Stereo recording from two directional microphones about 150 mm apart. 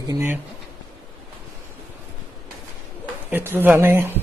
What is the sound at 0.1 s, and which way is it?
Speech, 15° right (ahead or behind).